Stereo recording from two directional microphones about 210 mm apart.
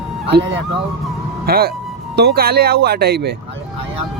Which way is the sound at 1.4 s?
45° right (ahead or behind).